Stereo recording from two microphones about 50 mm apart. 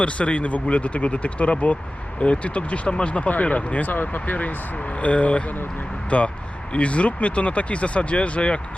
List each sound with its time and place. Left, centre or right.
0.0 s speech: left